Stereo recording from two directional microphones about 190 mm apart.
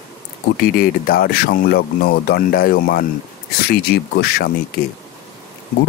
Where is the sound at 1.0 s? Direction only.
50° left (ahead or behind).